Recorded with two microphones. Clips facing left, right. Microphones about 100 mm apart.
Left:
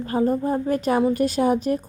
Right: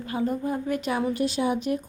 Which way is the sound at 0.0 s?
40° left (ahead or behind).